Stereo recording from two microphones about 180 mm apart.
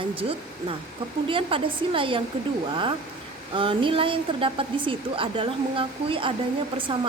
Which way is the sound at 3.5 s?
30° right (ahead or behind).